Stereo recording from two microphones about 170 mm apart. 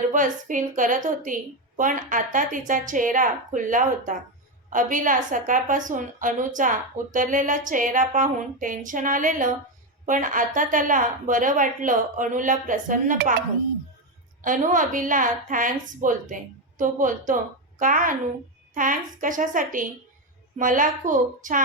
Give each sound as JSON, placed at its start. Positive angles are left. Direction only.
{"t": 0.1, "sound": "a woman's voice", "side_deg": -50}
{"t": 14.4, "sound": "a woman's voice", "side_deg": -50}